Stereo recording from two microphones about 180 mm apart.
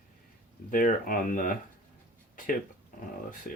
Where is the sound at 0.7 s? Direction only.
50° left (ahead or behind).